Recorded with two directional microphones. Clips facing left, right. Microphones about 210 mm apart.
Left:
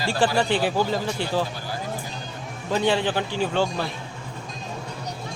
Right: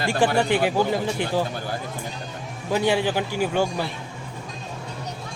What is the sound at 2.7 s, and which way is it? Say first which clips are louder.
Speech: right 1 dB; 10° right (ahead or behind).